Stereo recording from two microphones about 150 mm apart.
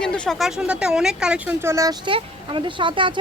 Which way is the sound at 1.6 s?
20° right (ahead or behind).